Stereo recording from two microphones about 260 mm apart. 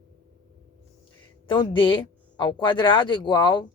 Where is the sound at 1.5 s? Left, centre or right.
Centre.